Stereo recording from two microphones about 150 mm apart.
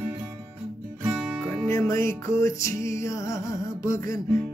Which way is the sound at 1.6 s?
20° left (ahead or behind).